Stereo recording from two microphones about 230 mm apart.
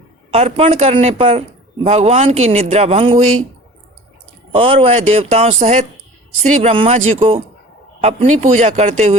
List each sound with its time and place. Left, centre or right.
0.3 s speech: right
4.5 s speech: right